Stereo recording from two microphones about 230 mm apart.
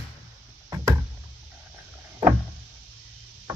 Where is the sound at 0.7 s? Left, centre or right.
Centre.